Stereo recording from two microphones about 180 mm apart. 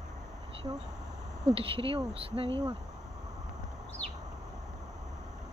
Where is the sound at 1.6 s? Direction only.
30° right (ahead or behind).